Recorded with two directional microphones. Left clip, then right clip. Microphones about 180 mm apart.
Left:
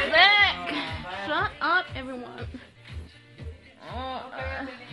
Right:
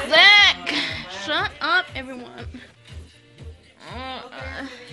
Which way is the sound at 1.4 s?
10° right (ahead or behind).